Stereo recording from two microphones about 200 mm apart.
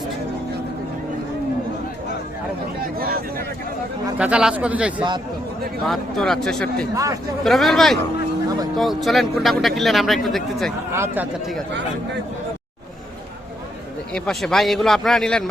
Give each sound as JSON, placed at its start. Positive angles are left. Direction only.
{"t": 2.8, "sound": "a sound", "side_deg": -50}
{"t": 4.2, "sound": "speech", "side_deg": -5}
{"t": 6.9, "sound": "speech", "side_deg": -15}
{"t": 7.4, "sound": "speech", "side_deg": 0}
{"t": 10.9, "sound": "speech", "side_deg": -10}
{"t": 14.1, "sound": "speech", "side_deg": 5}